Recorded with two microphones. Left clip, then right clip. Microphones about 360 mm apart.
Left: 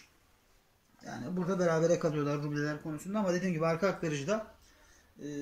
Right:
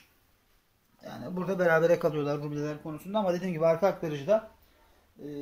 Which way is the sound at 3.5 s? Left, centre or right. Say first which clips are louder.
Right 10 dB; centre.